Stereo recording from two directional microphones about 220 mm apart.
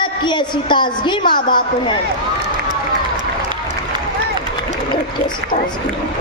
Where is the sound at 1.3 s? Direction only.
20° left (ahead or behind).